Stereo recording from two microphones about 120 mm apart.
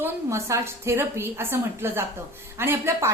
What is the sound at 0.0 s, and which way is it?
A woman's voice, 25° right (ahead or behind).